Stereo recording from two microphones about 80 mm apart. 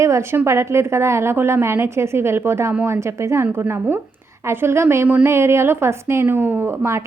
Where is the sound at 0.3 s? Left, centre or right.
Right.